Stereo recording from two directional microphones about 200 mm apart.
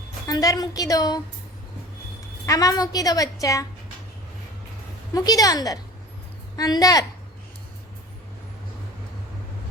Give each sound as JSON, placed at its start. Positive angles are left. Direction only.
{"t": 0.3, "sound": "a woman's voice", "side_deg": 20}
{"t": 2.5, "sound": "a woman's voice", "side_deg": 15}
{"t": 5.1, "sound": "a woman's voice", "side_deg": 20}